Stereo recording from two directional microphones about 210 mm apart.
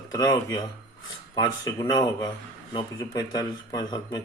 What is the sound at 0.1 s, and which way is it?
Speech, 15° left (ahead or behind).